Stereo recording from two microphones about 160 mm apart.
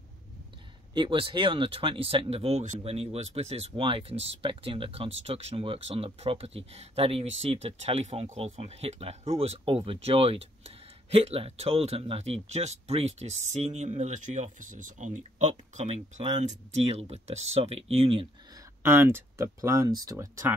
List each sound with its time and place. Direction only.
0.9 s speech: 30° right (ahead or behind)
18.8 s speech: 15° right (ahead or behind)